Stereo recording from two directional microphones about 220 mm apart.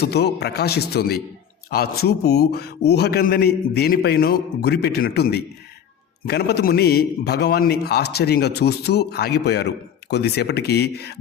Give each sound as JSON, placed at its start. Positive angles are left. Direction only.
{"t": 0.0, "sound": "a man's voice", "side_deg": 50}